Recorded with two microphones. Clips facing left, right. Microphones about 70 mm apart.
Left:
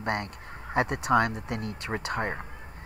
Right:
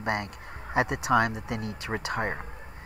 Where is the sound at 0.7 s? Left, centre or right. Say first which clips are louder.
Even; centre.